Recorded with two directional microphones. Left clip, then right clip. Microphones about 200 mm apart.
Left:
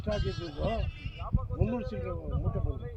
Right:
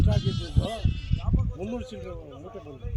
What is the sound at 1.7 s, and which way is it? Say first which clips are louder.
Speech: right 1 dB; 5° right (ahead or behind).